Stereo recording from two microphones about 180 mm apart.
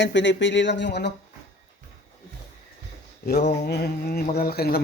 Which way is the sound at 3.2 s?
65° left (ahead or behind).